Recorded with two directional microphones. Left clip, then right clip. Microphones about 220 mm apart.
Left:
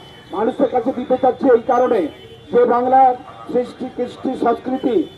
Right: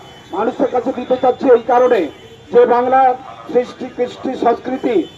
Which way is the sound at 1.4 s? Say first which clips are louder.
Right 5 dB; 55° left (ahead or behind).